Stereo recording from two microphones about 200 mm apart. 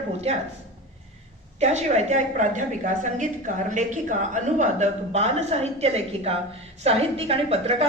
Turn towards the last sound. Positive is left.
turn(degrees=-30)  # may be behind; listen again after turning